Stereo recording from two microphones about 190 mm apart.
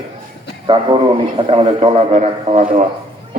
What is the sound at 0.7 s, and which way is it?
A man's voice, 25° right (ahead or behind).